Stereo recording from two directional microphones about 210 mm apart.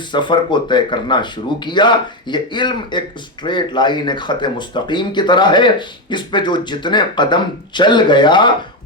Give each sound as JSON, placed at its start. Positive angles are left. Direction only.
{"t": 0.1, "sound": "speech", "side_deg": 20}